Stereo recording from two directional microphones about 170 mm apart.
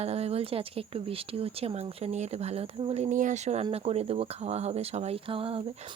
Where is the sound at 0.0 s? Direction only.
35° right (ahead or behind).